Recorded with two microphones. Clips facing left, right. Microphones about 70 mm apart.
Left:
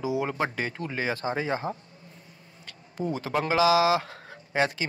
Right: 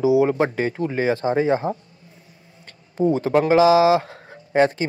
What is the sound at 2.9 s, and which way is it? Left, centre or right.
Speech, right.